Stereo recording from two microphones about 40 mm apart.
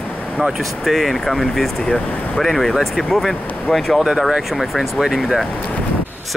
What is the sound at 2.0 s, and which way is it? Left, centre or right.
Speech, left.